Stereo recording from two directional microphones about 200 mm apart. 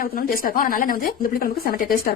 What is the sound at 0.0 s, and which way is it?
Speech, 45° left (ahead or behind).